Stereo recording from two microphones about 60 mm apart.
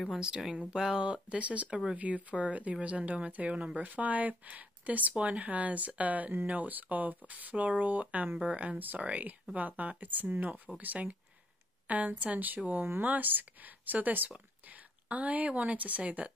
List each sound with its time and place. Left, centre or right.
0.6 s speech: centre